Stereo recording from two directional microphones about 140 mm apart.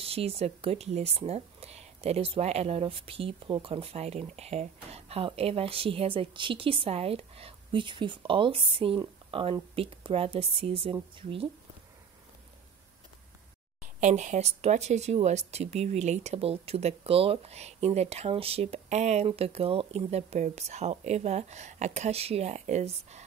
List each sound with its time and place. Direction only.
0.0 s speech: 45° right (ahead or behind)
13.9 s speech: 60° right (ahead or behind)